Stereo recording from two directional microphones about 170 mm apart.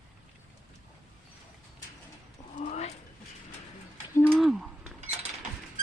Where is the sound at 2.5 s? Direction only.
45° left (ahead or behind).